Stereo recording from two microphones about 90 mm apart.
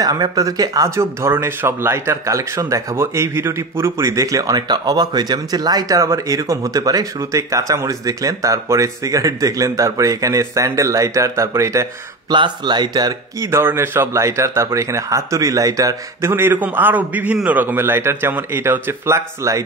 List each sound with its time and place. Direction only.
0.0 s speech: 45° right (ahead or behind)
12.3 s speech: 55° right (ahead or behind)
13.5 s speech: 25° right (ahead or behind)